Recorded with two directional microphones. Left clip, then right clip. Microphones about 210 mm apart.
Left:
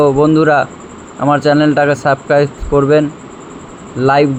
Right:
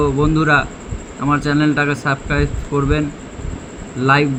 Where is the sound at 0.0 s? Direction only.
20° left (ahead or behind).